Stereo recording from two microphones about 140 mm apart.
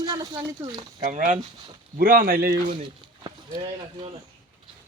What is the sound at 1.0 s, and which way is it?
Speech, 70° right (ahead or behind).